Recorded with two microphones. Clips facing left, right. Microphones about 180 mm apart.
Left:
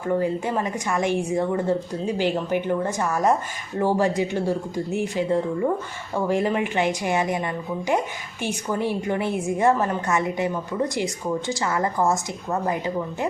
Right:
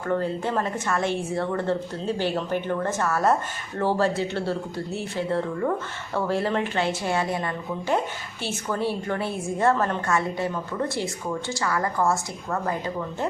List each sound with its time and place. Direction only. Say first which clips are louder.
0.1 s a woman's voice: left 2 dB; 10° left (ahead or behind)